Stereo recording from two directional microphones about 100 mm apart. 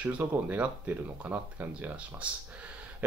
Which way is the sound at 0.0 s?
15° right (ahead or behind).